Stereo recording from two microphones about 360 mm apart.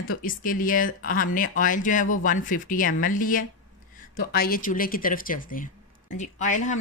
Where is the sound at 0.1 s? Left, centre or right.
Left.